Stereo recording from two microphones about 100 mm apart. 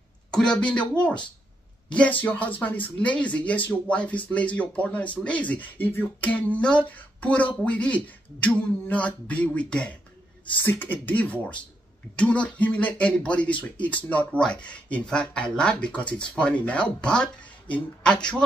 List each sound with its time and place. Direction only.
0.3 s speech: 10° left (ahead or behind)